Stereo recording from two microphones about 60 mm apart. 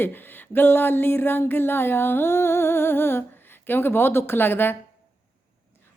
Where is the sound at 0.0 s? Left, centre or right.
Left.